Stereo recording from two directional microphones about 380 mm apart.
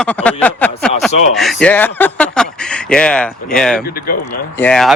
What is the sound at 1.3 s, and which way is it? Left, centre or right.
Speech, centre.